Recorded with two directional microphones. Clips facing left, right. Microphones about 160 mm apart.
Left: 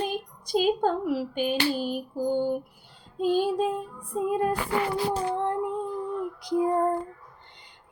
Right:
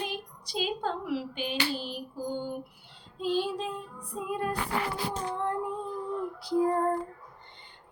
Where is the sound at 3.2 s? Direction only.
45° left (ahead or behind).